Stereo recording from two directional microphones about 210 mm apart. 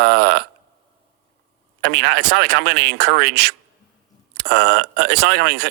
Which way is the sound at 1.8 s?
55° right (ahead or behind).